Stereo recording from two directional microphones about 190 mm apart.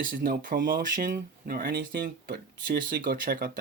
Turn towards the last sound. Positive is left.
turn(degrees=-50)  # may be behind; listen again after turning